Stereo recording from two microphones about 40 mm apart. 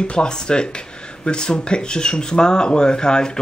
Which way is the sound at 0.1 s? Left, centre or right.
Left.